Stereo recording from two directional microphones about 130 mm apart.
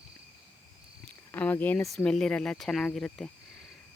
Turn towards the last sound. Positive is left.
turn(degrees=5)  # may be behind; listen again after turning